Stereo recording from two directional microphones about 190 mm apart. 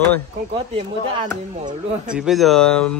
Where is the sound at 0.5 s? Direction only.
25° right (ahead or behind).